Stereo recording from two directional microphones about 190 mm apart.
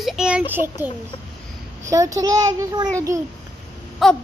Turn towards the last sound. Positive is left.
turn(degrees=0)  # may be behind; listen again after turning